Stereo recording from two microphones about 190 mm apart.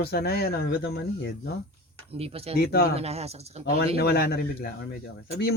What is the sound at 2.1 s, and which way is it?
Speech, 30° right (ahead or behind).